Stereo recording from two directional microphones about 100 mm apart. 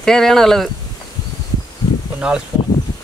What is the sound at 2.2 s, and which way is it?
Speech, 10° right (ahead or behind).